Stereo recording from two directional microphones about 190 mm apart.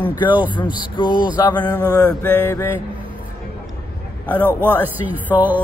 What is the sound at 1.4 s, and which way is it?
Speech, 25° left (ahead or behind).